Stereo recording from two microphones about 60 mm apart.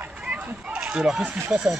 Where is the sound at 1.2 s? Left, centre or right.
Right.